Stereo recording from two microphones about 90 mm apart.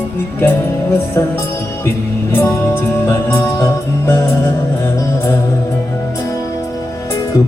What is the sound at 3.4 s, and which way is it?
Music, 50° left (ahead or behind).